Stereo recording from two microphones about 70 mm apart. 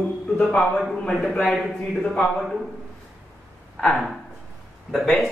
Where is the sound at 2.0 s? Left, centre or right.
Centre.